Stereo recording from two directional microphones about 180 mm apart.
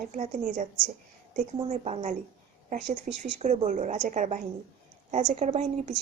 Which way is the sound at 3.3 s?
40° right (ahead or behind).